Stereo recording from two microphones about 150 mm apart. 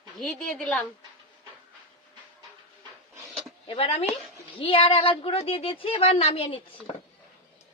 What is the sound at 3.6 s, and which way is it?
A woman's voice, 40° left (ahead or behind).